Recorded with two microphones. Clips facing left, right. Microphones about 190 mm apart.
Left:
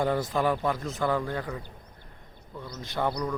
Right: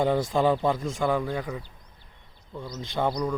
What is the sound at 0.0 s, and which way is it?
Speech, 25° right (ahead or behind).